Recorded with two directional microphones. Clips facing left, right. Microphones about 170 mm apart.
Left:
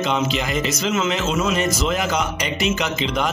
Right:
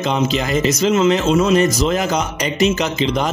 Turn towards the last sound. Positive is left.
turn(degrees=-40)  # may be behind; listen again after turning